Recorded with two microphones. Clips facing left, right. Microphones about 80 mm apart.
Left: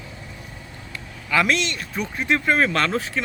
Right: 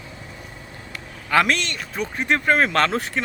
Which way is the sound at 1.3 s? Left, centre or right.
Right.